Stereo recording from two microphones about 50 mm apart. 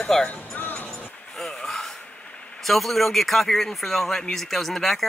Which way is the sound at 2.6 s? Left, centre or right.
Centre.